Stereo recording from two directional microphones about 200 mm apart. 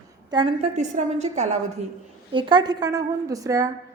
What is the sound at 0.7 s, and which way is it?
Speech, 40° right (ahead or behind).